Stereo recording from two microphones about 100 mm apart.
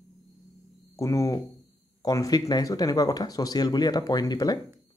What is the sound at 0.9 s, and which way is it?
Speech, 35° left (ahead or behind).